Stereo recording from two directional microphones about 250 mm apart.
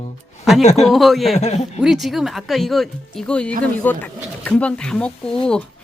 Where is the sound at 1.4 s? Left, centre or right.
Left.